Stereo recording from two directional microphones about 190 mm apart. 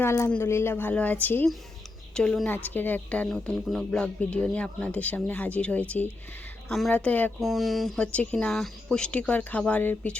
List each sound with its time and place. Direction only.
0.0 s speech: 15° left (ahead or behind)